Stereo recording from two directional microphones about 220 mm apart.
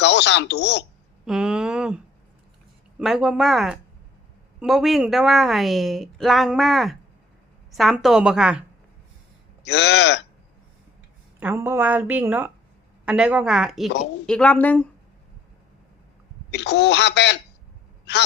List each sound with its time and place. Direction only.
0.0 s speech: 50° left (ahead or behind)
1.2 s speech: 5° right (ahead or behind)
3.0 s speech: 5° right (ahead or behind)
9.6 s speech: 50° left (ahead or behind)
11.3 s a woman's voice: 10° right (ahead or behind); by 14.8 s 5° left (ahead or behind)
16.5 s speech: 50° left (ahead or behind)